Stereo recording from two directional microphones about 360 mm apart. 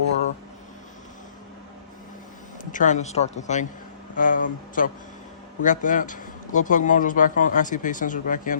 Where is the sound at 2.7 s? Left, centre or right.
Left.